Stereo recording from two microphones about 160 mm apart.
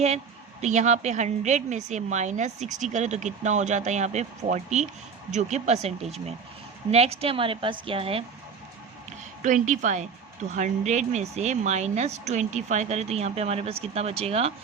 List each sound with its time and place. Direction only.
0.6 s a woman's voice: 45° right (ahead or behind)
9.4 s a woman's voice: 50° right (ahead or behind)